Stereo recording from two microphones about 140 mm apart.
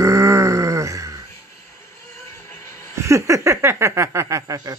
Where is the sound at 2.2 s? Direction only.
20° left (ahead or behind).